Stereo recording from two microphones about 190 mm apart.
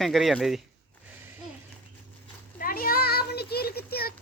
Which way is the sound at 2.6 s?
50° left (ahead or behind).